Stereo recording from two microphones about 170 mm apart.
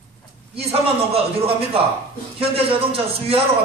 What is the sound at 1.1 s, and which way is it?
A man's voice, 35° right (ahead or behind).